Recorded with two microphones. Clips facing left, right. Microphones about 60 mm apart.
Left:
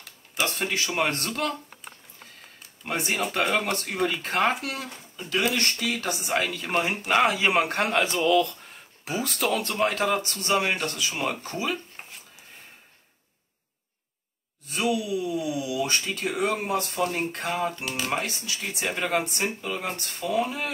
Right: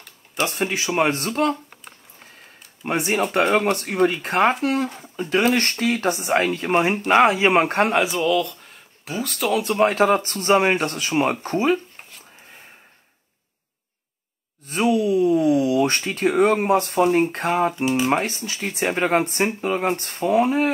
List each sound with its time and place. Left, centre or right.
0.6 s speech: centre
2.8 s speech: right
8.1 s speech: centre
9.8 s speech: right
14.7 s a sound: right
17.3 s speech: right